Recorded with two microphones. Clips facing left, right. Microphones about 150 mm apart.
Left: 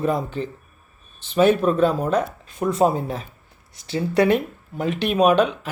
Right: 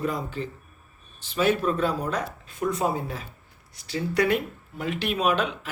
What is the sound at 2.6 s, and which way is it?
Speech, 40° left (ahead or behind).